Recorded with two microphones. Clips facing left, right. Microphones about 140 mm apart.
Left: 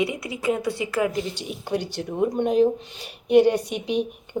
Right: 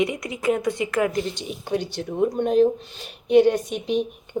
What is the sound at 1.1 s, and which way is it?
Speech, 10° left (ahead or behind).